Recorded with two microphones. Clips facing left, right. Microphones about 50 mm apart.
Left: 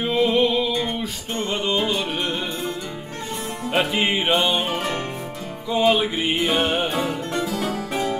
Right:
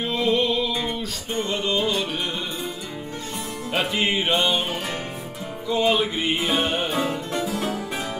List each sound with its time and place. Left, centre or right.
0.0 s music: centre
3.9 s music: centre
5.7 s music: centre
7.4 s music: centre